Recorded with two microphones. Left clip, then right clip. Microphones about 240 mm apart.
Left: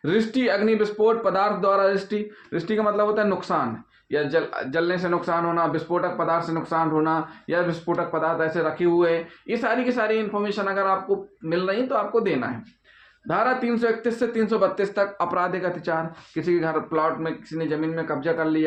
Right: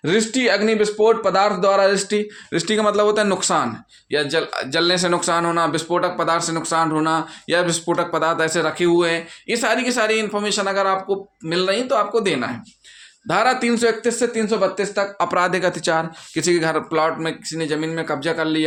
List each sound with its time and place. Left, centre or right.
0.0 s speech: right